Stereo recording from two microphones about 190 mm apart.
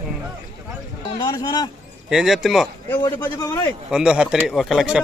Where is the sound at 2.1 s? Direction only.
Centre (ahead or behind).